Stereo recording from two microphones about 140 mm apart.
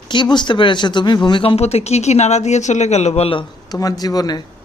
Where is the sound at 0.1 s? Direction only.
35° left (ahead or behind).